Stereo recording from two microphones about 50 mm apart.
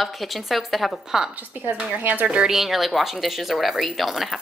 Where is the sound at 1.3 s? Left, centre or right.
Right.